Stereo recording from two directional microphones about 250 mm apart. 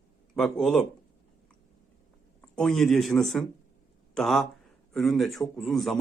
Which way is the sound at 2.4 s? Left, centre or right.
Centre.